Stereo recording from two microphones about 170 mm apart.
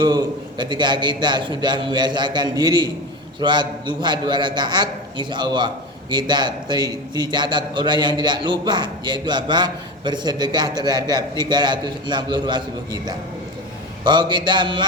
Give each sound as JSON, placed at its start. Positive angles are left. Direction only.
{"t": 0.0, "sound": "a man's voice", "side_deg": -25}